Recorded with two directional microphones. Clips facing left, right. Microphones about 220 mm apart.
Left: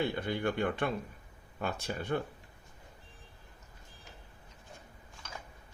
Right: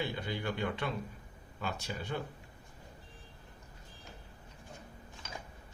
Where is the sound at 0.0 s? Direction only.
55° left (ahead or behind).